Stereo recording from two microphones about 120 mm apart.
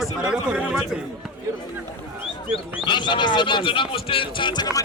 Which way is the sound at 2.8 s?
40° left (ahead or behind).